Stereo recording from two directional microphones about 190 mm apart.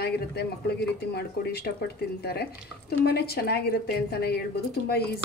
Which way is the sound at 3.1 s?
55° left (ahead or behind).